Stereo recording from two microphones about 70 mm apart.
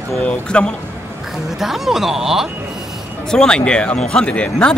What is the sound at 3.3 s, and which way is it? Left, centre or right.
Speech, centre.